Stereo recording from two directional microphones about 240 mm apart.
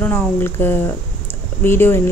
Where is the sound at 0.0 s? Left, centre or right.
Centre.